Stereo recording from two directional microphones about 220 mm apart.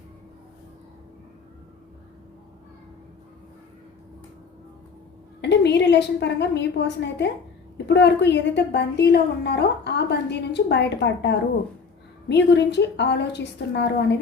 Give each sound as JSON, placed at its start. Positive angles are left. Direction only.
{"t": 5.4, "sound": "a woman's voice", "side_deg": 50}